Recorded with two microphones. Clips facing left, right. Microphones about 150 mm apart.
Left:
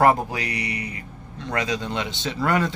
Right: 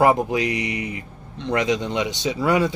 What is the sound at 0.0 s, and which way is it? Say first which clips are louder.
Speech: right 2 dB; 15° right (ahead or behind).